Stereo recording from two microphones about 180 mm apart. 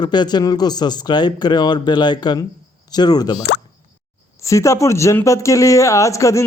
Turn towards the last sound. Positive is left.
turn(degrees=15)  # may be behind; listen again after turning